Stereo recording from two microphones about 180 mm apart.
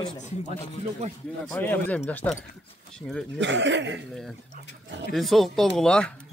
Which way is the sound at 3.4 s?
80° right.